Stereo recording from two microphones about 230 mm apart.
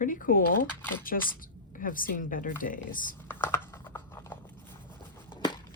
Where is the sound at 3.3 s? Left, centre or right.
Centre.